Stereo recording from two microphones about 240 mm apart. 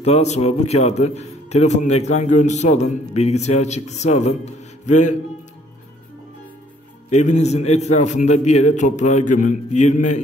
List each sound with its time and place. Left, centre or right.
0.0 s a man's voice: left
7.1 s a man's voice: left